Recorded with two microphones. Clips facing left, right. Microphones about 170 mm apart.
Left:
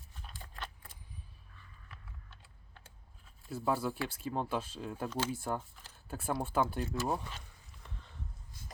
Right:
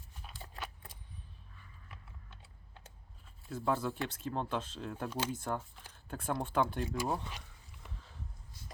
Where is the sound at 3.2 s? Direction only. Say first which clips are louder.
Even; 5° left (ahead or behind).